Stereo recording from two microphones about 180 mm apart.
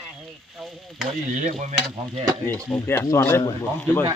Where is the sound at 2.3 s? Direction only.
10° left (ahead or behind).